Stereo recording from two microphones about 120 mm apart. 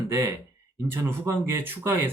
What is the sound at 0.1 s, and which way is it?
Speech, 20° right (ahead or behind).